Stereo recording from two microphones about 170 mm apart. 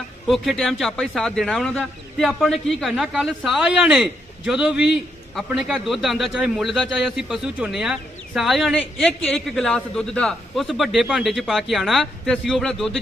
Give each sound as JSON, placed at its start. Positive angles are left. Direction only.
{"t": 0.3, "sound": "a man's voice", "side_deg": 0}